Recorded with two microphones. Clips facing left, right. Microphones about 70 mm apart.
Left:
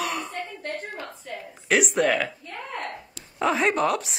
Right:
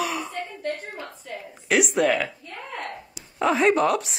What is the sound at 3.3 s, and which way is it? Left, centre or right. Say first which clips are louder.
Speech: right 3 dB; centre.